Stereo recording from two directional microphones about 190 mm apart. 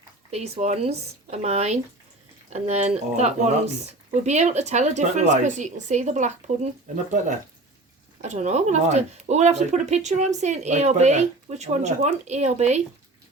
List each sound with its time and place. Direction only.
0.3 s speech: 35° right (ahead or behind)
8.2 s speech: 40° right (ahead or behind)